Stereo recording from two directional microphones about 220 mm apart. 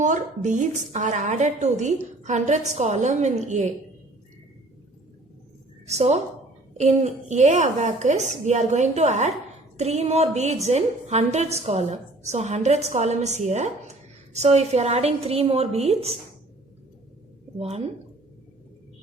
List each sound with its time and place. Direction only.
0.0 s a woman's voice: 35° right (ahead or behind)
5.8 s a woman's voice: 30° right (ahead or behind)
17.6 s a woman's voice: 30° right (ahead or behind)